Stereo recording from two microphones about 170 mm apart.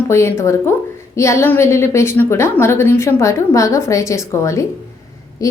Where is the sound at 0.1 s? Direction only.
15° left (ahead or behind).